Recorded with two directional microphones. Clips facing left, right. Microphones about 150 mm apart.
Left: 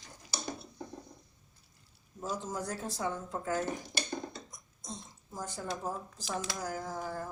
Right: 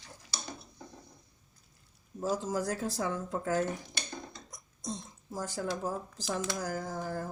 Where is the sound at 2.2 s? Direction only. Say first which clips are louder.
Right 5 dB; 75° right (ahead or behind).